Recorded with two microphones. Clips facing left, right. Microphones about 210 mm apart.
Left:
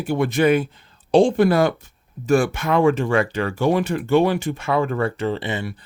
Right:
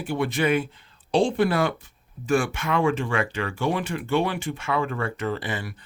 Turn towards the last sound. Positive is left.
turn(degrees=25)  # may be behind; listen again after turning